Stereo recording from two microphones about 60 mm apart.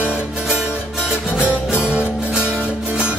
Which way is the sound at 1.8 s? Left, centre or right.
Centre.